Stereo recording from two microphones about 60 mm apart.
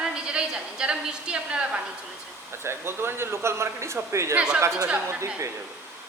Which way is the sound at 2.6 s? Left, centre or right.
Right.